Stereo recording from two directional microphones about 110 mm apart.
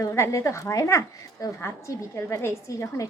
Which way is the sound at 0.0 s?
25° left (ahead or behind).